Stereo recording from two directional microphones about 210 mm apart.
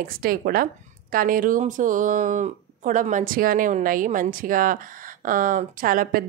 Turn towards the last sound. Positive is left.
turn(degrees=-40)  # may be behind; listen again after turning